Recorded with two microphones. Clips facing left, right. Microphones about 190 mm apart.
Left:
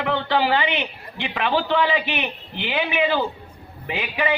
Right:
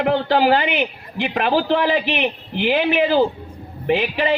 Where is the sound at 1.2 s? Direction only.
40° right (ahead or behind).